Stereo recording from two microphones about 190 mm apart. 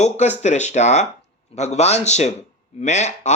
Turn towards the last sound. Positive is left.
turn(degrees=35)  # may be behind; listen again after turning